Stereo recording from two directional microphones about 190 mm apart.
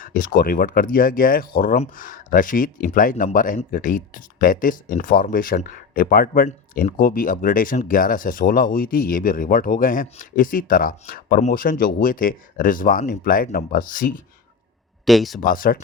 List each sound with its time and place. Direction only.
0.0 s speech: 45° left (ahead or behind)
15.0 s speech: centre (ahead or behind)
15.4 s speech: 45° left (ahead or behind)